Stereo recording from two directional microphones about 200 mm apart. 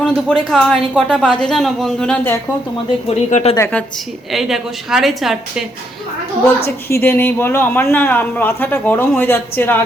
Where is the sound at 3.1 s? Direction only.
35° left (ahead or behind).